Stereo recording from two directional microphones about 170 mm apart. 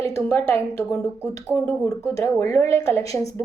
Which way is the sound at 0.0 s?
15° left (ahead or behind).